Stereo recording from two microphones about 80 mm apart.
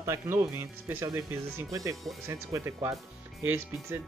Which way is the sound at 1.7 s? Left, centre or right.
Right.